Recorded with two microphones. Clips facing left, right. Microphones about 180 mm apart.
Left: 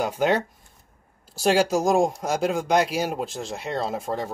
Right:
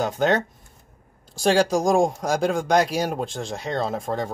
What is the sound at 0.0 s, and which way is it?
A man's voice, 10° left (ahead or behind).